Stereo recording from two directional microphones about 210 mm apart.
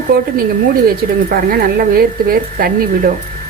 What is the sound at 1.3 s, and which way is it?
Speech, 45° right (ahead or behind).